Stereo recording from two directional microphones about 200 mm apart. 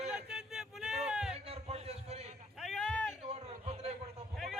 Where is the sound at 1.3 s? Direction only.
30° right (ahead or behind).